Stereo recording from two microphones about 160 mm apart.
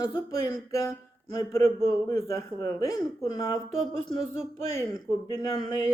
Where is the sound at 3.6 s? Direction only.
40° right (ahead or behind).